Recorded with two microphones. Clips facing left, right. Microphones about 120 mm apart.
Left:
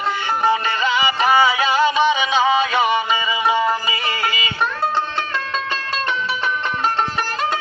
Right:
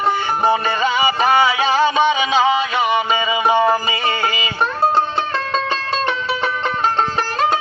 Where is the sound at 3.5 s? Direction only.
25° right (ahead or behind).